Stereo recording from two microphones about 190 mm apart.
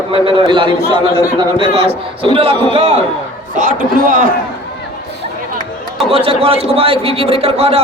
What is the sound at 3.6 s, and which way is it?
Speech, 45° right (ahead or behind).